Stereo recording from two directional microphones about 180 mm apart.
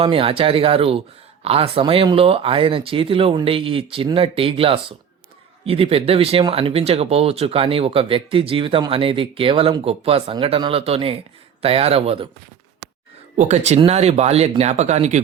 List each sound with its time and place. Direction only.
0.0 s speech: 30° right (ahead or behind)
13.3 s speech: 40° right (ahead or behind)